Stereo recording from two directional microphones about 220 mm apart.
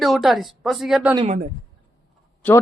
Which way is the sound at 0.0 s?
Centre (ahead or behind).